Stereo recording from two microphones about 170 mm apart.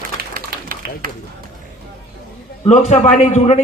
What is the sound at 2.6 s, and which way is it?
Speech, 40° left (ahead or behind).